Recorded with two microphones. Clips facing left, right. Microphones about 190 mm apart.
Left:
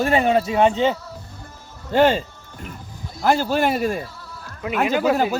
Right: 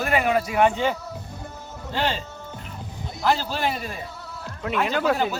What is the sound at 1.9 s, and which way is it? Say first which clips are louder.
Speech: left 10 dB; 50° left (ahead or behind).